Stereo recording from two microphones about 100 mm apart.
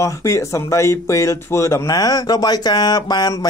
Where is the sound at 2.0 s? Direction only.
40° left (ahead or behind).